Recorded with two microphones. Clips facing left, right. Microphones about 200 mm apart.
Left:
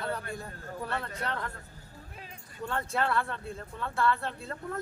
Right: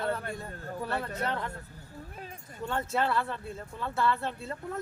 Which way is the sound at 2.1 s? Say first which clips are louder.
Right 3 dB; 45° right (ahead or behind).